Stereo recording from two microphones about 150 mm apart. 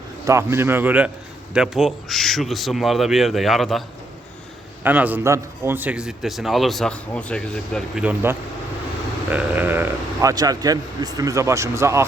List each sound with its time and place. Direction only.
0.3 s a man's voice: 15° right (ahead or behind); by 3.8 s centre (ahead or behind)
4.8 s a man's voice: 10° right (ahead or behind); by 8.0 s 5° left (ahead or behind)
8.0 s a man's voice: 15° right (ahead or behind)